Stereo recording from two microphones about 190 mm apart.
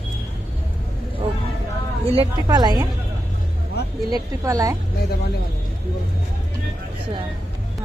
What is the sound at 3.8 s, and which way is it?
Speech, 60° left (ahead or behind).